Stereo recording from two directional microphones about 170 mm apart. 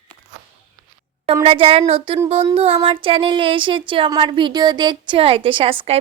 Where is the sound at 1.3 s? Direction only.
35° right (ahead or behind).